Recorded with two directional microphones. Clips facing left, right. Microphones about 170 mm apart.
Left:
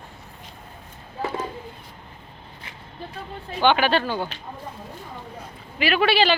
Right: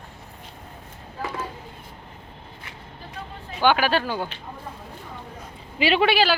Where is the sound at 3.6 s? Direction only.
5° right (ahead or behind).